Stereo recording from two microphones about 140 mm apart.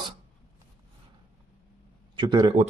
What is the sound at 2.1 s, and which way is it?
Speech, 30° right (ahead or behind).